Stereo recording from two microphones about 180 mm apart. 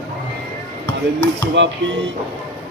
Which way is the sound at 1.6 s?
90° right.